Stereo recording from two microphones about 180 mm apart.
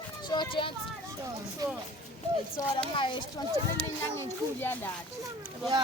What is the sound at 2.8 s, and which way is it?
Speech, 30° left (ahead or behind).